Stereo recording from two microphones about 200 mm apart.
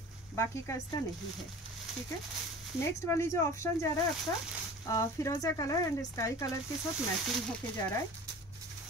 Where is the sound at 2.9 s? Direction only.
15° left (ahead or behind).